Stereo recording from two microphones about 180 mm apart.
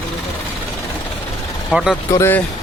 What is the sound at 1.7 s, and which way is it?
Speech, 5° right (ahead or behind).